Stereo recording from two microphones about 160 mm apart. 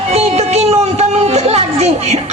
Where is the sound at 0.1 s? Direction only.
40° right (ahead or behind).